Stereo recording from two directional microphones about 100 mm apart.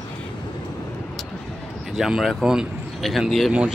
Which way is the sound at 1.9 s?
5° right (ahead or behind).